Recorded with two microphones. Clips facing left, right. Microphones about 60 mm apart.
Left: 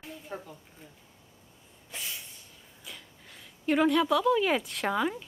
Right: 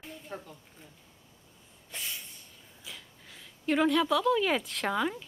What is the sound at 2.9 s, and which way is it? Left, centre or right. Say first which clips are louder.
Speech: even; centre.